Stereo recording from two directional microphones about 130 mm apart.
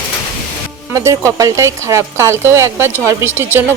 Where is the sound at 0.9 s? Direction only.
25° right (ahead or behind).